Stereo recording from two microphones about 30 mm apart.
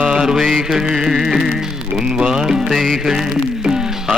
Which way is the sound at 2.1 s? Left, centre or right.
Right.